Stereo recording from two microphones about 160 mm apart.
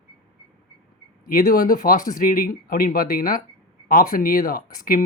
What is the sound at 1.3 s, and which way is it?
Speech, 65° left (ahead or behind).